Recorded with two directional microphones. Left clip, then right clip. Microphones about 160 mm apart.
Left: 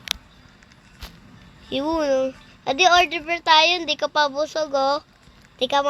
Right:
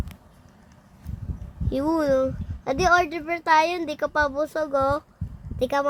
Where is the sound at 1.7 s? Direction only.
35° right (ahead or behind).